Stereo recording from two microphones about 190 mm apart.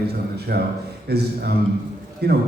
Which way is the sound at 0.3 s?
60° right (ahead or behind).